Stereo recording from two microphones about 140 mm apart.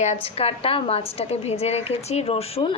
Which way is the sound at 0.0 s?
50° left (ahead or behind).